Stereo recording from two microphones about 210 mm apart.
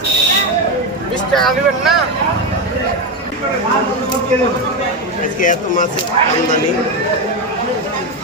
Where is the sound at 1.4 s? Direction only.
Centre (ahead or behind).